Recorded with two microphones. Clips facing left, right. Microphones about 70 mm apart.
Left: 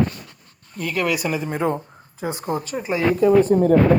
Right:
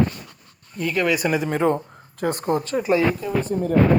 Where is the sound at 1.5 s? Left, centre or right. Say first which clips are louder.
Right 2 dB; right.